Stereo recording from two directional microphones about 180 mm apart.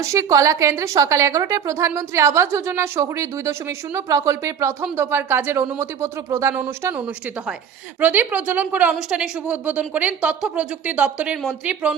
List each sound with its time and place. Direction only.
0.0 s a woman's voice: 15° right (ahead or behind)